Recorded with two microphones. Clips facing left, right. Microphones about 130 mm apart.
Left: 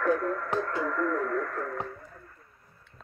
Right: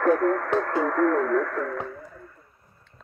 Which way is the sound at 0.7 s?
65° right (ahead or behind).